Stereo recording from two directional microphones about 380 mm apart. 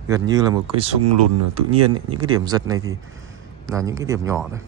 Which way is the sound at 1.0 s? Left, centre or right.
Right.